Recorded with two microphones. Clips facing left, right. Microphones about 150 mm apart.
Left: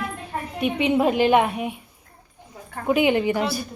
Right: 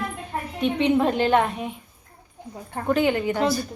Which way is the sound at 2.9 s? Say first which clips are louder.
Left 2 dB; 15° left (ahead or behind).